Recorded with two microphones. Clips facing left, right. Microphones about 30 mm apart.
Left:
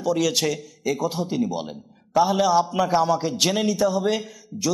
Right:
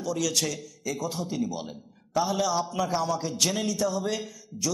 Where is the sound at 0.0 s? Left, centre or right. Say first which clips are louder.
Left 6 dB; left.